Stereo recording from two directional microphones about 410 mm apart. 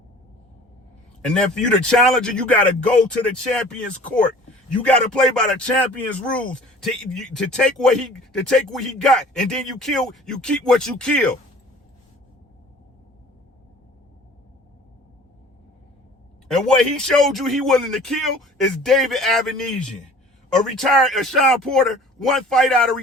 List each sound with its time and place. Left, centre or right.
1.2 s a man's voice: centre
16.5 s a man's voice: centre